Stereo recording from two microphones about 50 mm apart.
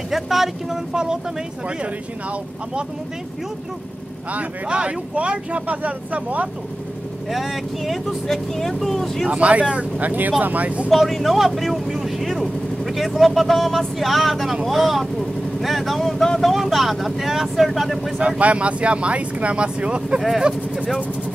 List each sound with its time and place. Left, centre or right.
0.1 s speech: centre
0.9 s speech: centre
4.3 s speech: right
7.2 s speech: centre
9.3 s speech: right
10.9 s speech: centre
18.4 s speech: right
20.2 s speech: centre